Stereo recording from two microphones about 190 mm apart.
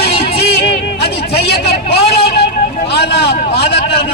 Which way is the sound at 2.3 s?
60° left (ahead or behind).